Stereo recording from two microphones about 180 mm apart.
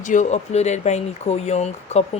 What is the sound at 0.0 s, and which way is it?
Speech, 45° left (ahead or behind).